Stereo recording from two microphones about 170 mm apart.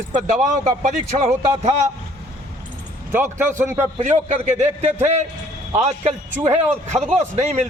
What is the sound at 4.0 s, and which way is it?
A man's voice, 40° right (ahead or behind).